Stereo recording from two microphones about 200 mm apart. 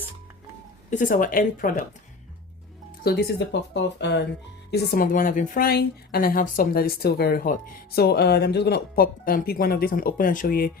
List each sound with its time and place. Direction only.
0.9 s a woman's voice: 40° left (ahead or behind)
3.0 s speech: 50° left (ahead or behind)
4.7 s a woman's voice: 45° left (ahead or behind)